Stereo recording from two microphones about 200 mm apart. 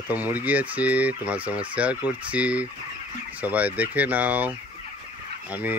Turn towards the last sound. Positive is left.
turn(degrees=-10)  # may be behind; listen again after turning